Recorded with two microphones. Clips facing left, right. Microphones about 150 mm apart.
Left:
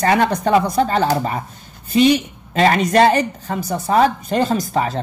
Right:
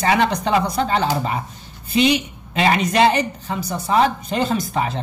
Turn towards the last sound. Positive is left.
turn(degrees=40)  # may be behind; listen again after turning